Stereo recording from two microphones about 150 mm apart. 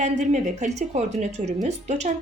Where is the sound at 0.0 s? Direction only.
55° right (ahead or behind).